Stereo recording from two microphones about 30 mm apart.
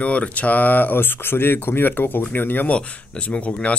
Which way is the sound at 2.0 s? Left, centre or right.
Left.